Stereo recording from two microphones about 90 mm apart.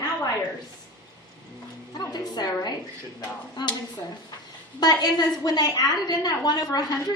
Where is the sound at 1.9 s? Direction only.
50° left (ahead or behind).